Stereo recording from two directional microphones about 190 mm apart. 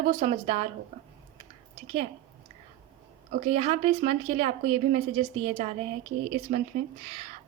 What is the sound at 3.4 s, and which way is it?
A woman's voice, 30° right (ahead or behind).